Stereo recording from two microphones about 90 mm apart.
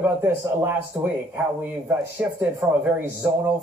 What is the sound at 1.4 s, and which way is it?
Speech, 20° right (ahead or behind).